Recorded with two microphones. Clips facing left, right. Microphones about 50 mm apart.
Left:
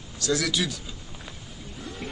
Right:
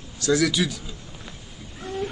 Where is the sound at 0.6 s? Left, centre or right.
Centre.